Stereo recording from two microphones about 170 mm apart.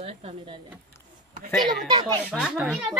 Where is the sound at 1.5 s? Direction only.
Centre (ahead or behind).